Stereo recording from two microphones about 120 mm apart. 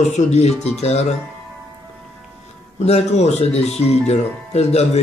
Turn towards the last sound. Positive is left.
turn(degrees=65)  # may be behind; listen again after turning